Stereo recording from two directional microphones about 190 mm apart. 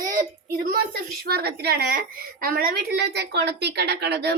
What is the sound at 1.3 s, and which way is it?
A woman's voice, 60° right (ahead or behind).